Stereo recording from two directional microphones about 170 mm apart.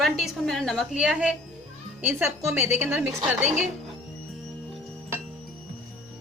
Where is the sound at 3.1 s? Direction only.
45° right (ahead or behind).